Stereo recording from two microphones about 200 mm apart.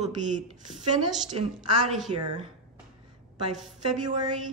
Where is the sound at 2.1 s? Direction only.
30° right (ahead or behind).